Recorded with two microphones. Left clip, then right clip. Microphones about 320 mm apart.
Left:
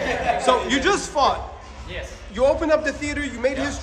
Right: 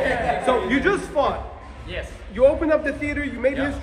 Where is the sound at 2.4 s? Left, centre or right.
Centre.